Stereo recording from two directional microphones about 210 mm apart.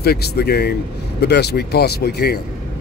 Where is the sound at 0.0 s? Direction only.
50° left (ahead or behind).